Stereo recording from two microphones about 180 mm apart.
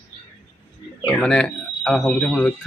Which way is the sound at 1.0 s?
5° left (ahead or behind).